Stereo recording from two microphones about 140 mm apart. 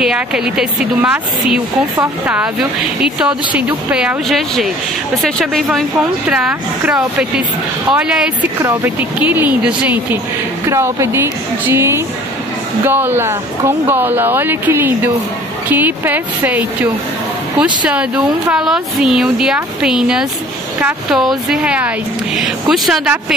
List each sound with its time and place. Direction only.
0.0 s speech: 5° right (ahead or behind)